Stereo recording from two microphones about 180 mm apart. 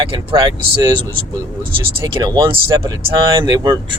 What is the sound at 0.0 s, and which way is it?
Speech, 30° right (ahead or behind).